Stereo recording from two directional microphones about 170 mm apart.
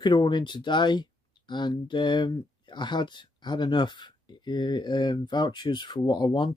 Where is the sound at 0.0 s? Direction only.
25° left (ahead or behind).